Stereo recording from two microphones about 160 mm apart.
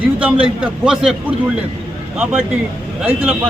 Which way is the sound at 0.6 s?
5° right (ahead or behind).